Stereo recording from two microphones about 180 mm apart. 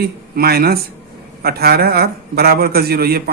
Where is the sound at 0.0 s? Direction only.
60° right (ahead or behind).